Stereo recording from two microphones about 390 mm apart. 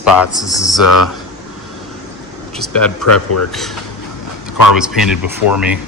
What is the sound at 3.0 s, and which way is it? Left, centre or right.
Speech, left.